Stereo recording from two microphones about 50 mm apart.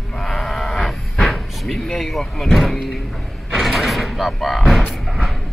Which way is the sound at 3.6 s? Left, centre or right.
Centre.